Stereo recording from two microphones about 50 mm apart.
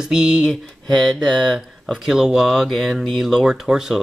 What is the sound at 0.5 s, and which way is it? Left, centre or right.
Speech, centre.